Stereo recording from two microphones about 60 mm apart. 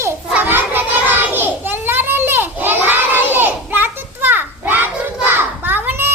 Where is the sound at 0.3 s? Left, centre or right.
Right.